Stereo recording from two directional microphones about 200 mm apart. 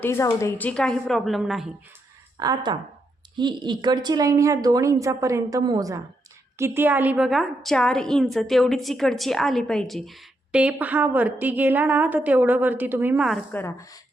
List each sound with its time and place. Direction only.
0.0 s a woman's voice: 15° left (ahead or behind)
2.4 s a woman's voice: 20° right (ahead or behind)
13.5 s speech: 15° left (ahead or behind)